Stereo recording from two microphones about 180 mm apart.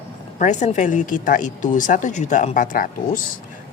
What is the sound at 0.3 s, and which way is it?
Speech, 40° left (ahead or behind).